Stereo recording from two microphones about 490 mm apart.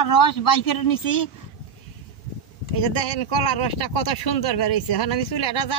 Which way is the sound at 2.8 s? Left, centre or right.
Left.